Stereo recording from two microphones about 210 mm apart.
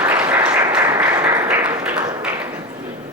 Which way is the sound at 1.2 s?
10° right (ahead or behind).